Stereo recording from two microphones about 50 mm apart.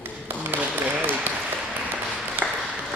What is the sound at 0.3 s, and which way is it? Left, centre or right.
Tap, right.